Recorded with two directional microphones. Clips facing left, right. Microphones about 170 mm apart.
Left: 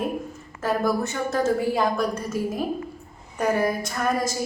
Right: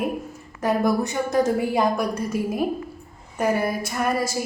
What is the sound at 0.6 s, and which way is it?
A woman's voice, 15° right (ahead or behind).